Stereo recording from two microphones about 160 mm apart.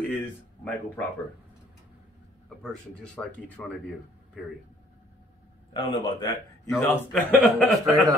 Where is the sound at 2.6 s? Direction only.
5° left (ahead or behind).